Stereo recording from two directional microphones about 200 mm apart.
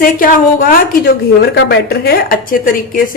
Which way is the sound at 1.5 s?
50° left (ahead or behind).